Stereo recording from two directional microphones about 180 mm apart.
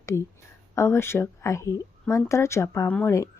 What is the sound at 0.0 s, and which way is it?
Speech, 15° left (ahead or behind).